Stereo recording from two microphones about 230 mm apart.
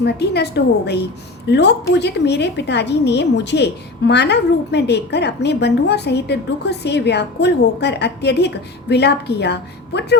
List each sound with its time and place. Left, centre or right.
0.0 s a woman's voice: left